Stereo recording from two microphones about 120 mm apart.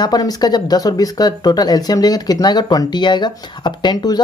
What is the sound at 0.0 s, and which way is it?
Speech, 30° left (ahead or behind).